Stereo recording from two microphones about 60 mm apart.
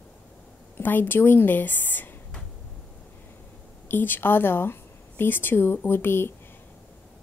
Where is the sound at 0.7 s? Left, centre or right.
Left.